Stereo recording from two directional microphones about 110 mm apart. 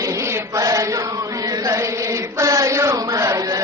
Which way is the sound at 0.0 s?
30° right (ahead or behind).